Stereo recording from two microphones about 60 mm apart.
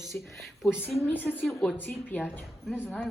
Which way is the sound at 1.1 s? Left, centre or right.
Left.